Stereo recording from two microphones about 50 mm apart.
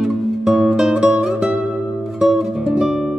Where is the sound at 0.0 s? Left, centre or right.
Centre.